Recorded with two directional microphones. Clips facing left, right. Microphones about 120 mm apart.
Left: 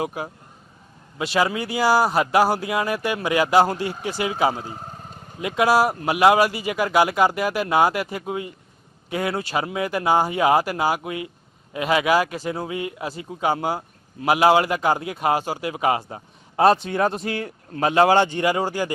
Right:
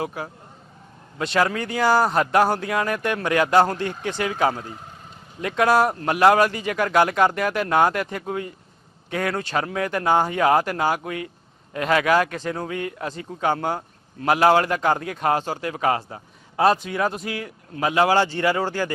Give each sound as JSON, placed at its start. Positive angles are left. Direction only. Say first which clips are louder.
{"t": 0.0, "sound": "a man's voice", "louder": "left 2 dB", "side_deg": 15}
{"t": 1.2, "sound": "a man's voice", "louder": "even", "side_deg": 5}
{"t": 4.6, "sound": "a man's voice", "louder": "left 3 dB", "side_deg": 35}
{"t": 5.4, "sound": "a man's voice", "louder": "even", "side_deg": 10}